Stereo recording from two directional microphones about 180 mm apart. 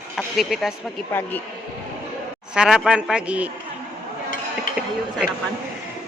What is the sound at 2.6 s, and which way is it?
Speech, centre (ahead or behind).